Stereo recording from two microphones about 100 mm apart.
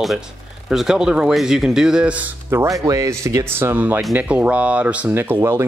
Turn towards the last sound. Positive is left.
turn(degrees=-25)  # may be behind; listen again after turning